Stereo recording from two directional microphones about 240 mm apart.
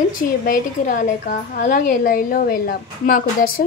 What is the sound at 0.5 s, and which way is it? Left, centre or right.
A woman's voice, left.